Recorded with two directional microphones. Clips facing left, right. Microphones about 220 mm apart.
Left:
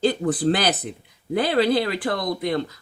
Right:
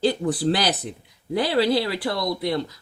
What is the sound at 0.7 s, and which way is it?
Speech, 20° left (ahead or behind).